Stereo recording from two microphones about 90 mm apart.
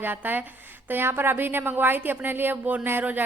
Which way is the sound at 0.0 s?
20° right (ahead or behind).